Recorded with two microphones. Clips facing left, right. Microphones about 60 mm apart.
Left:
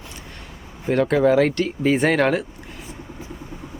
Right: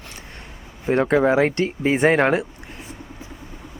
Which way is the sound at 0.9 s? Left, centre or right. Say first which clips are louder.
Even; right.